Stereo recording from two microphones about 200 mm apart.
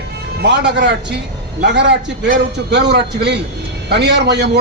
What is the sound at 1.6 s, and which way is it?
A man's voice, 60° right (ahead or behind).